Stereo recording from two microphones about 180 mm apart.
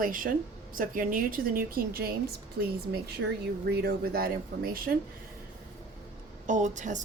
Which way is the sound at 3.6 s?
60° right (ahead or behind).